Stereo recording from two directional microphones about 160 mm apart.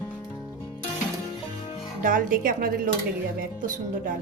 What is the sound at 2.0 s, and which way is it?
A woman's voice, 60° right (ahead or behind).